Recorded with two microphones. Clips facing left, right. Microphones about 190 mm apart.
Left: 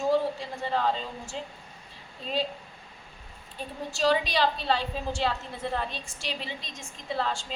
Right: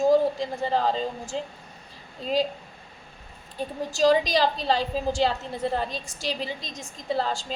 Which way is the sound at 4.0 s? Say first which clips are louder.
Right 4 dB; 40° right (ahead or behind).